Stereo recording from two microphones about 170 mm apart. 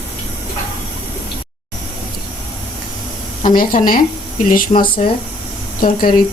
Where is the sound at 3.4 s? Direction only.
55° left (ahead or behind).